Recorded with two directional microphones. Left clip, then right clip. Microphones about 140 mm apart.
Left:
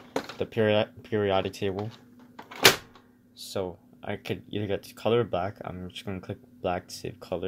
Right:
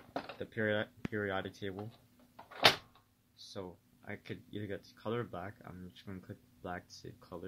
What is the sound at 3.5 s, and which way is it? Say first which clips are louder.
Speech: left 14 dB; 10° left (ahead or behind).